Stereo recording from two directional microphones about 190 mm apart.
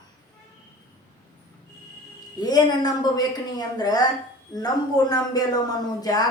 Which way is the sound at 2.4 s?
20° left (ahead or behind).